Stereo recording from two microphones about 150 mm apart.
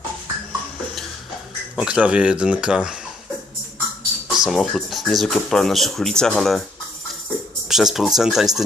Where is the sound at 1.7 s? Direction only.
5° right (ahead or behind).